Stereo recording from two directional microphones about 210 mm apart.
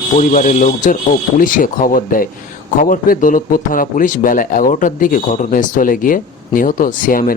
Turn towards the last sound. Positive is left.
turn(degrees=40)  # may be behind; listen again after turning